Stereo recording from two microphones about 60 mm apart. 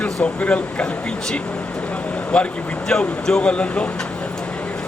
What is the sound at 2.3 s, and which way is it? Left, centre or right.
Speech, centre.